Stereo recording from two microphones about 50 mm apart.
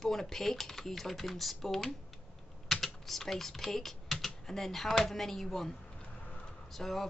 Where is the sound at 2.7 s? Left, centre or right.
Centre.